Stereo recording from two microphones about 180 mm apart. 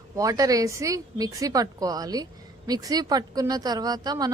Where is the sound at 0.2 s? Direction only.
20° right (ahead or behind).